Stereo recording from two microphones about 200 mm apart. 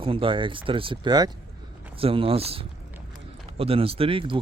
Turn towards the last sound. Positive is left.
turn(degrees=-25)  # may be behind; listen again after turning